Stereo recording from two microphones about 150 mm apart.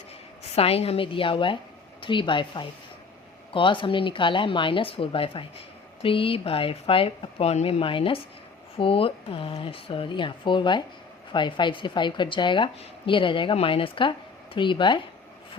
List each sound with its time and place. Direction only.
0.5 s speech: 40° left (ahead or behind)